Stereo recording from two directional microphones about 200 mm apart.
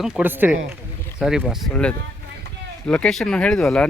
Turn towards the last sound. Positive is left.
turn(degrees=0)  # may be behind; listen again after turning